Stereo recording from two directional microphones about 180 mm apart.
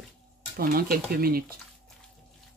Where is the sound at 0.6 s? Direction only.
55° right (ahead or behind).